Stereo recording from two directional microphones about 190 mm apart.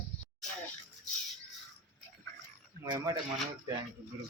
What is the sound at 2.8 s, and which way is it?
Speech, 20° right (ahead or behind).